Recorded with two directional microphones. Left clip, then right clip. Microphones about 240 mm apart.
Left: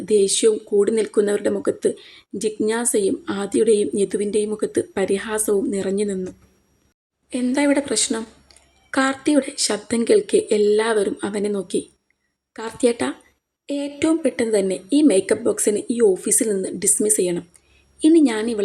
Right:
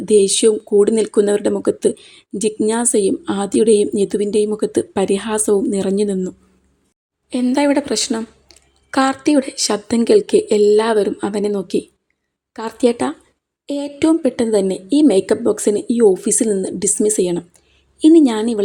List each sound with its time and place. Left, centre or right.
0.0 s speech: right